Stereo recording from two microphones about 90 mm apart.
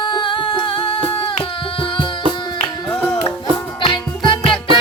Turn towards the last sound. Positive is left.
turn(degrees=70)  # may be behind; listen again after turning